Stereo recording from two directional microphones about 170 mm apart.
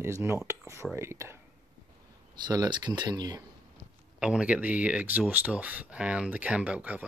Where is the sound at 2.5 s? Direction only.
25° right (ahead or behind).